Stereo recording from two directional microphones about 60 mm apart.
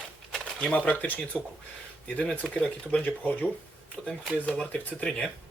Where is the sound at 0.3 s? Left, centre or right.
Centre.